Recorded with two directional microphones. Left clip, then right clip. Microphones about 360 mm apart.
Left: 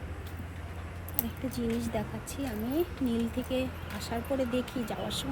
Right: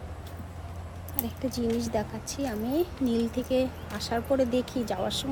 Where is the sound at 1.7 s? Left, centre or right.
Centre.